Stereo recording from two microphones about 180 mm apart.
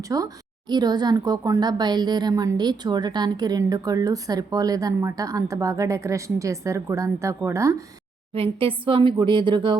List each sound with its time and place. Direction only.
0.1 s speech: 20° right (ahead or behind)
8.3 s speech: 30° right (ahead or behind)